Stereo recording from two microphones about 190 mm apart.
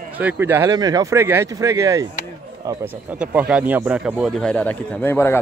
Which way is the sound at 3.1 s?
5° right (ahead or behind).